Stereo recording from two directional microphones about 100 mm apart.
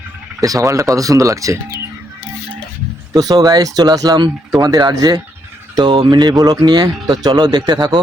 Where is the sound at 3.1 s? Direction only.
40° right (ahead or behind).